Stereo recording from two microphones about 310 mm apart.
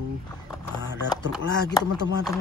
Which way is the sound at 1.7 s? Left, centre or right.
Centre.